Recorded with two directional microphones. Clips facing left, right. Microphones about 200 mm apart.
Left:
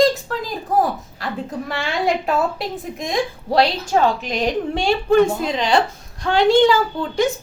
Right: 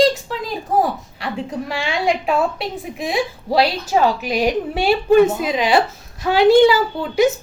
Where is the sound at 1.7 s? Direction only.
Centre (ahead or behind).